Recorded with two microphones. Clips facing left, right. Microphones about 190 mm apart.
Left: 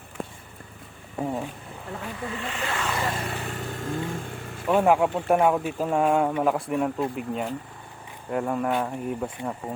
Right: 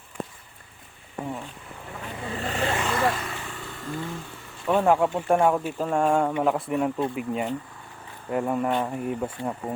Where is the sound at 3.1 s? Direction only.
30° left (ahead or behind).